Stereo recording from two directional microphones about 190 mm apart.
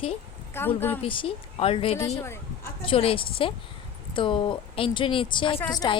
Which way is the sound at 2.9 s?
30° left (ahead or behind).